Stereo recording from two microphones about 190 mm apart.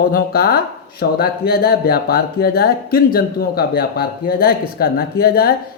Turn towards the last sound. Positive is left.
turn(degrees=55)  # may be behind; listen again after turning